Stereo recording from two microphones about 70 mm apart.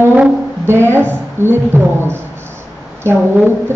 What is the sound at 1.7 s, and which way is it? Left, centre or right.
Speech, right.